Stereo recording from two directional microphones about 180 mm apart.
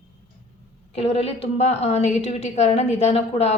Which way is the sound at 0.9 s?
35° left (ahead or behind).